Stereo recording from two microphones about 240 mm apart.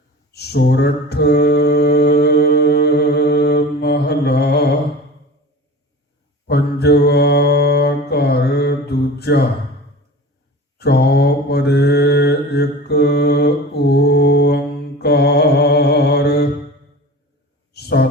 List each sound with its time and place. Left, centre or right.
0.3 s mantra: left
6.5 s mantra: left
10.8 s mantra: left
17.7 s a sound: left